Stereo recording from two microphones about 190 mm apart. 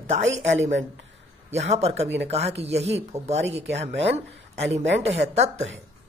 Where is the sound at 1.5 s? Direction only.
35° right (ahead or behind).